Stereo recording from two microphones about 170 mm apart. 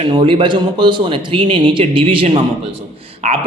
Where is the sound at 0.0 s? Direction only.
30° right (ahead or behind).